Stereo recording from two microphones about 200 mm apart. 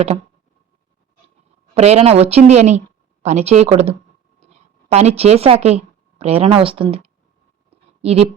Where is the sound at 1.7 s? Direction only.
30° right (ahead or behind).